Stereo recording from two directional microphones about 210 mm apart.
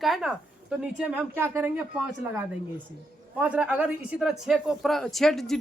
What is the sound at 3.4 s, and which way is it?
Speech, 5° right (ahead or behind).